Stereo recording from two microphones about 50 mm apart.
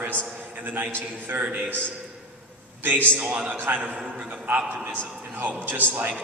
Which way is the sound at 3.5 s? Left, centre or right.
Right.